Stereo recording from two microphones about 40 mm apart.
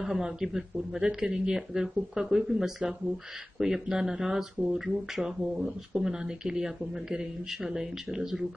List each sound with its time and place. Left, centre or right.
0.0 s speech: centre